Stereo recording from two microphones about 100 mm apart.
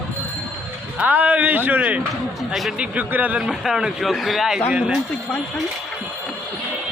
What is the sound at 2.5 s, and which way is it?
A man's voice, 5° right (ahead or behind).